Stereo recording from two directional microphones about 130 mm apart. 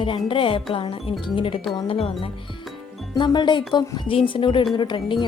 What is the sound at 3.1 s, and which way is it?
Speech, 35° left (ahead or behind).